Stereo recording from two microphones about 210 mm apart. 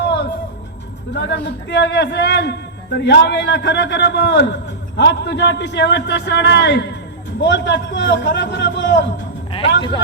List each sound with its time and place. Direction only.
1.1 s a man's voice: 55° left (ahead or behind)
9.5 s music: 25° left (ahead or behind)